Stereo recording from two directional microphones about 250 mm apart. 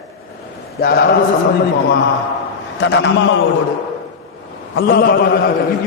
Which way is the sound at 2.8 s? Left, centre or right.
Left.